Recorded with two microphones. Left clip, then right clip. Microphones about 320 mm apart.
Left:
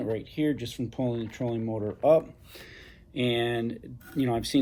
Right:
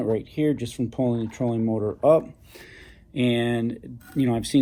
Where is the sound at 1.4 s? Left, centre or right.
Right.